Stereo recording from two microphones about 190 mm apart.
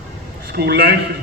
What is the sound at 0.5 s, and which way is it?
Speech, 55° right (ahead or behind).